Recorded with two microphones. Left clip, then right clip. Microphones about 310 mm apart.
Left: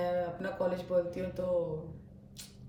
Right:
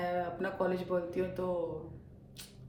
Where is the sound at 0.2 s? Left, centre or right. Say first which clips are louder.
Left 1 dB; centre.